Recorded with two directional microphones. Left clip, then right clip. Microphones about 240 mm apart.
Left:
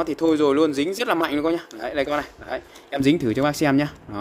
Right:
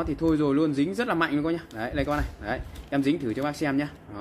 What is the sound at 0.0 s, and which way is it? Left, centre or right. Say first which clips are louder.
Speech: left 6 dB; left.